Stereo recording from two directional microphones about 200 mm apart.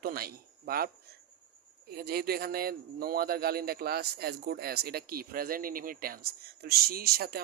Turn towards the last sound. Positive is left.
turn(degrees=-50)  # may be behind; listen again after turning